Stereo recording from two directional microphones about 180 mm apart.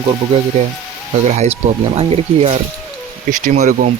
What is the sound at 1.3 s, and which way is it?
Speech, 40° right (ahead or behind).